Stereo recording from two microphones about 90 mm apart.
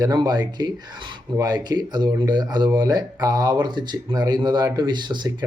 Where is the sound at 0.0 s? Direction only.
50° right (ahead or behind).